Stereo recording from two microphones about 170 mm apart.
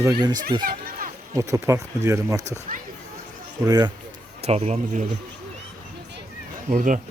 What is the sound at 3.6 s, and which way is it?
Speech, 25° right (ahead or behind).